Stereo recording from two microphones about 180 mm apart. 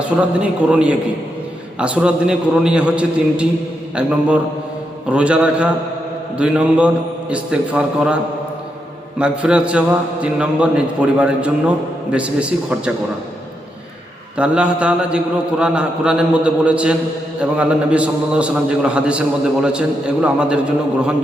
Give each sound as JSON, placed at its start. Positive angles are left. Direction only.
{"t": 0.2, "sound": "a man's voice", "side_deg": -5}
{"t": 14.3, "sound": "a man's voice", "side_deg": -5}
{"t": 20.2, "sound": "a man's voice", "side_deg": -5}